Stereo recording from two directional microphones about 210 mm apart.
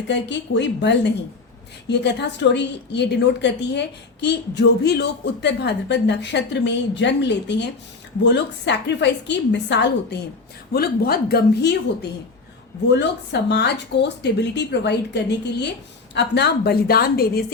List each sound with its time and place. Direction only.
0.1 s a woman's voice: 55° left (ahead or behind)
12.9 s speech: 55° left (ahead or behind)